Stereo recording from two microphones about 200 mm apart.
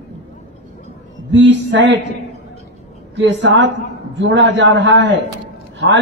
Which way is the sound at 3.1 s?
65° right (ahead or behind).